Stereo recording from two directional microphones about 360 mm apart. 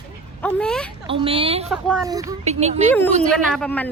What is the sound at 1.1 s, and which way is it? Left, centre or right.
Speech, centre.